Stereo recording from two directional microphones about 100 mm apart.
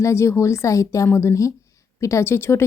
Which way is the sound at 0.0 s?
30° left (ahead or behind).